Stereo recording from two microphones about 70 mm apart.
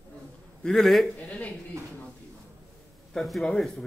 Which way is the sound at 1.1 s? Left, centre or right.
Left.